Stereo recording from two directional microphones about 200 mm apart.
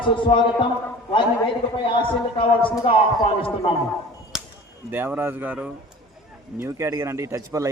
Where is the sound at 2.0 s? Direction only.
25° left (ahead or behind).